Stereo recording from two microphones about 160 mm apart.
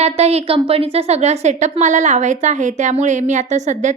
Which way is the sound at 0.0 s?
40° right (ahead or behind).